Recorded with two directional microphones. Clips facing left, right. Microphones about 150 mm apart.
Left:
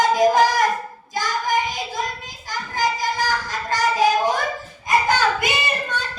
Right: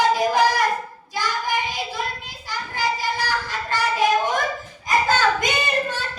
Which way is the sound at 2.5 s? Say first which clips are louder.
Left 2 dB; 45° left (ahead or behind).